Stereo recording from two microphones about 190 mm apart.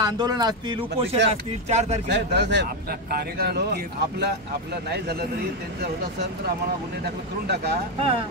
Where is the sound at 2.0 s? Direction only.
65° right (ahead or behind).